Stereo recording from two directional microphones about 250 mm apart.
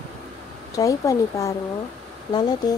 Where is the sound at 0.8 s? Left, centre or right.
Centre.